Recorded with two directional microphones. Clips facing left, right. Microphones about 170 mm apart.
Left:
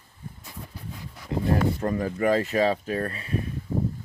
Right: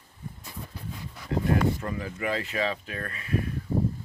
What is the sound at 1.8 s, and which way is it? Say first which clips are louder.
Speech: left 7 dB; 45° left (ahead or behind).